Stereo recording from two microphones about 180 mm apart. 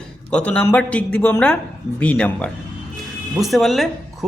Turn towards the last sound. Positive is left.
turn(degrees=0)  # may be behind; listen again after turning